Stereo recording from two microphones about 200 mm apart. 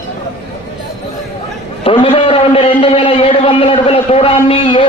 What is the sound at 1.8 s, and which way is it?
A man's voice, 30° left (ahead or behind).